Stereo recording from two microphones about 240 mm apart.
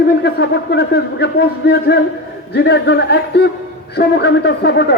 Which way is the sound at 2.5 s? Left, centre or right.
Left.